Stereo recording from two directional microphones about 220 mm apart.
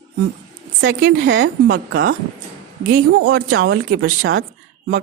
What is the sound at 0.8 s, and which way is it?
Speech, 65° right (ahead or behind).